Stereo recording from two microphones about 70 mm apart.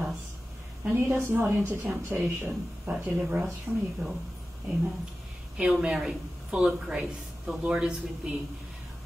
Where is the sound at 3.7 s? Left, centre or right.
Right.